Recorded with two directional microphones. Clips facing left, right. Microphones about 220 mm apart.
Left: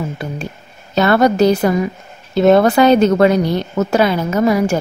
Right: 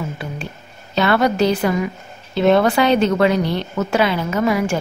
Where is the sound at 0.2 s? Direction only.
40° left (ahead or behind).